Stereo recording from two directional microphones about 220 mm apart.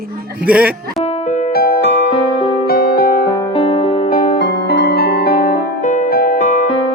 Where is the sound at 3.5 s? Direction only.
25° left (ahead or behind).